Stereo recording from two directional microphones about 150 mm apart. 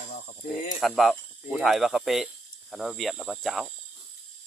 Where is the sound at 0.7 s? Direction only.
Centre (ahead or behind).